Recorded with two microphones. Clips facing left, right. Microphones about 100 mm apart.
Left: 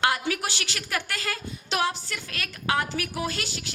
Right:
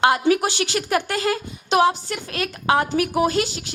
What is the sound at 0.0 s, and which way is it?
Speech, 20° right (ahead or behind).